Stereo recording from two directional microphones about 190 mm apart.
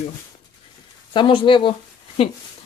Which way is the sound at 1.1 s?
25° left (ahead or behind).